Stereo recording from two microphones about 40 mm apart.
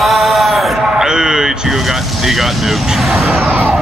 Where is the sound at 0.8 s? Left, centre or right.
Centre.